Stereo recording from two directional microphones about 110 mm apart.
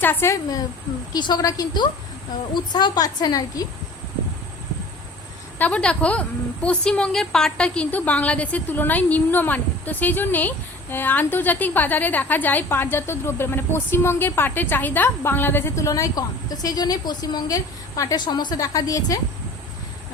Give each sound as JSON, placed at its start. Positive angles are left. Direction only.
{"t": 0.0, "sound": "a woman's voice", "side_deg": 20}
{"t": 1.1, "sound": "a woman's voice", "side_deg": 35}
{"t": 5.5, "sound": "a woman's voice", "side_deg": 10}